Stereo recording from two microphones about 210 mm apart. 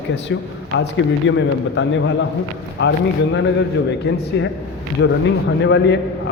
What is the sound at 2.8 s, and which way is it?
Speech, 55° left (ahead or behind).